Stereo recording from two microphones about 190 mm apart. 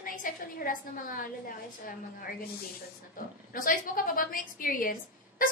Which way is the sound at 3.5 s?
45° left (ahead or behind).